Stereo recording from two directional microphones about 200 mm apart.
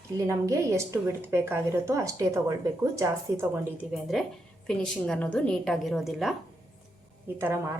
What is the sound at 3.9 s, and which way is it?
A woman's voice, centre (ahead or behind).